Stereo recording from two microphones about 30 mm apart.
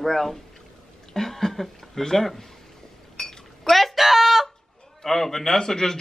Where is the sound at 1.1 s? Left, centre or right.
Centre.